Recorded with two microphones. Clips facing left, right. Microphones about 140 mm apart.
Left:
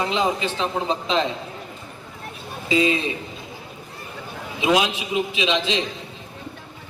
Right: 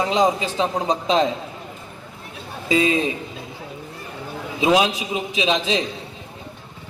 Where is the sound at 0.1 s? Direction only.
40° right (ahead or behind).